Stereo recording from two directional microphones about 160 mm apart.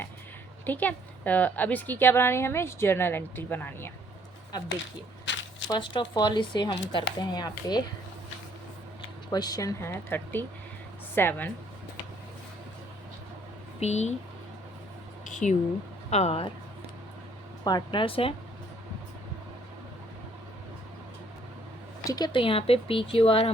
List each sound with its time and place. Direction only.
0.6 s a woman's voice: 10° left (ahead or behind)
5.7 s speech: 30° left (ahead or behind)
9.3 s a woman's voice: 25° left (ahead or behind)
13.7 s speech: 45° left (ahead or behind)
15.2 s speech: 50° left (ahead or behind)
17.6 s speech: 25° left (ahead or behind)
22.0 s speech: 25° left (ahead or behind)